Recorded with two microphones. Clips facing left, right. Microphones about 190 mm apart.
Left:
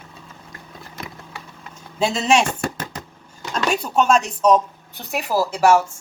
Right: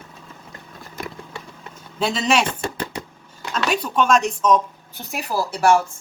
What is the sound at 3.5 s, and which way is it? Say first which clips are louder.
Speech: left 1 dB; 35° left (ahead or behind).